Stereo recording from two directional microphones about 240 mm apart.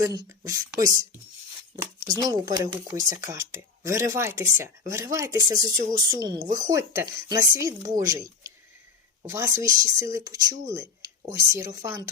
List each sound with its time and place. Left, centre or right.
0.0 s speech: centre